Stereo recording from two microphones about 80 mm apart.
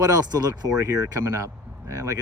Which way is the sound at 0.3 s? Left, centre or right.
Right.